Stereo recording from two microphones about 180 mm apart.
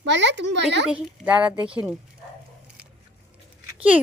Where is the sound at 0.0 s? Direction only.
80° right.